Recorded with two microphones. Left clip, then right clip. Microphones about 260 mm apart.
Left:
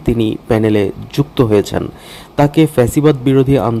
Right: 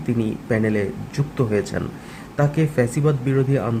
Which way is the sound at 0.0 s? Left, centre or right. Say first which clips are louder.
Left 9 dB; left.